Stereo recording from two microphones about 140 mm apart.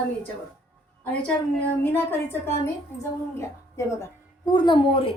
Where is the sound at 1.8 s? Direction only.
15° left (ahead or behind).